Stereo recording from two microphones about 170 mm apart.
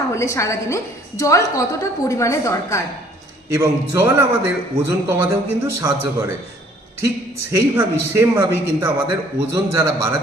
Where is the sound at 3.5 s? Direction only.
15° right (ahead or behind).